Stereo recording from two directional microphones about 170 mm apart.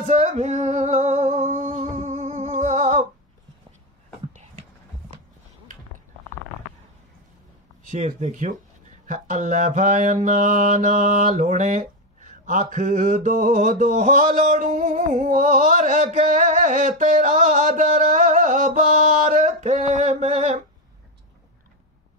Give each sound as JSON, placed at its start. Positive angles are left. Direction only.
{"t": 0.0, "sound": "singing", "side_deg": -40}
{"t": 7.8, "sound": "mantra", "side_deg": -50}